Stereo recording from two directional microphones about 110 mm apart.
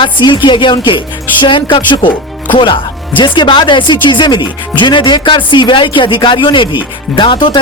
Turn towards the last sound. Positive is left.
turn(degrees=50)  # may be behind; listen again after turning